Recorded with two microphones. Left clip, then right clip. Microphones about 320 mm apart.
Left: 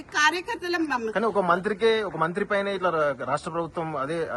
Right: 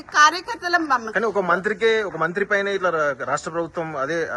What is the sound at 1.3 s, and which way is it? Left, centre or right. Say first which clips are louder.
A man's voice: right 3 dB; centre.